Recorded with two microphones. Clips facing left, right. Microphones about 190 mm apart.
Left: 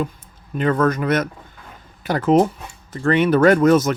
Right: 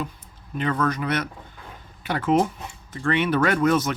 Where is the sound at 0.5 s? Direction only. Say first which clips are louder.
Left 6 dB; 45° left (ahead or behind).